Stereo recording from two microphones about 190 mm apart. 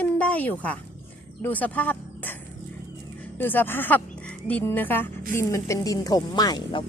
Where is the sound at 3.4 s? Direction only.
10° left (ahead or behind).